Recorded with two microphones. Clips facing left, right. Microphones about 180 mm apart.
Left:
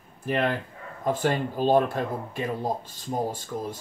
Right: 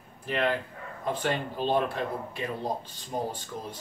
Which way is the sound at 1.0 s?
45° left (ahead or behind).